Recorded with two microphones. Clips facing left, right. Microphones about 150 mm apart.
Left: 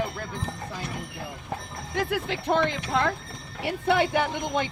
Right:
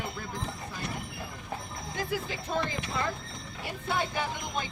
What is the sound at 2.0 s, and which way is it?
Speech, 70° left (ahead or behind).